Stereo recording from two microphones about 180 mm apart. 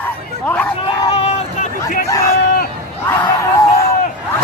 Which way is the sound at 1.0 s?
35° left (ahead or behind).